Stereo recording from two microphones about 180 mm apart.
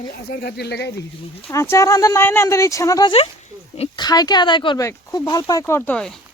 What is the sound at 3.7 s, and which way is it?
Speech, 35° left (ahead or behind).